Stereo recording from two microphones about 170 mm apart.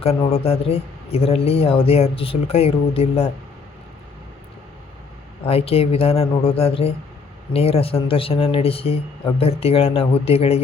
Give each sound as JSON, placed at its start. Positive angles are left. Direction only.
{"t": 0.0, "sound": "speech", "side_deg": 35}
{"t": 5.5, "sound": "speech", "side_deg": 35}